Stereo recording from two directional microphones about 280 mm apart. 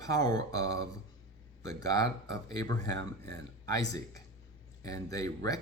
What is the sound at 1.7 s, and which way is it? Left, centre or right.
Speech, centre.